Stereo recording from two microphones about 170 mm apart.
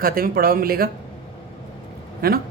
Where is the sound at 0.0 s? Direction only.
60° right (ahead or behind).